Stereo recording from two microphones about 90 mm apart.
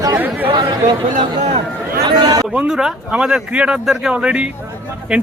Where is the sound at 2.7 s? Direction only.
5° right (ahead or behind).